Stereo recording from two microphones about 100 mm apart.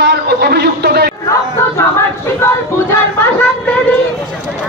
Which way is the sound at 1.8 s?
25° left (ahead or behind).